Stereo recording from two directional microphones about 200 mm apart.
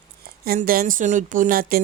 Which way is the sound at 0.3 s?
50° right (ahead or behind).